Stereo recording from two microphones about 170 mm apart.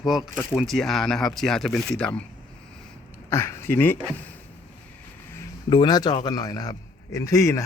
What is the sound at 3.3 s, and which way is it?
Speech, 15° left (ahead or behind).